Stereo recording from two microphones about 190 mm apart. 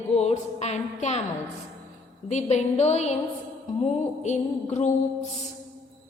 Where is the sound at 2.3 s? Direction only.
35° left (ahead or behind).